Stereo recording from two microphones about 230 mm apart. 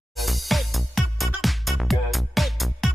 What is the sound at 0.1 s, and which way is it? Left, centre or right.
Music, centre.